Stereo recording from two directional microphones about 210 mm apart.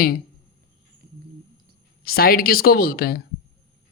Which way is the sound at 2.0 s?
45° left (ahead or behind).